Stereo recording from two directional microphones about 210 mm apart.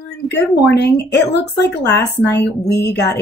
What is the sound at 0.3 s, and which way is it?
Speech, 50° left (ahead or behind).